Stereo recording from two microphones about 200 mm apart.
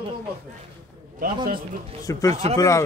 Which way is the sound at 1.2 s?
45° right (ahead or behind).